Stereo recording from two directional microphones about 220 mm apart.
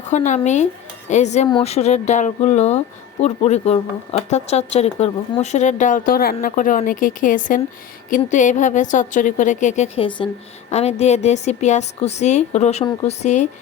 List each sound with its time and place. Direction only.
0.1 s speech: 35° left (ahead or behind)